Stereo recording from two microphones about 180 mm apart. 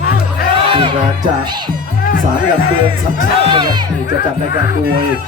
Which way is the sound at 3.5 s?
25° right (ahead or behind).